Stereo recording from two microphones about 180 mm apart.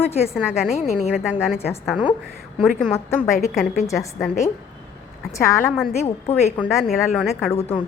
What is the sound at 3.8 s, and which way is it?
Speech, 15° left (ahead or behind).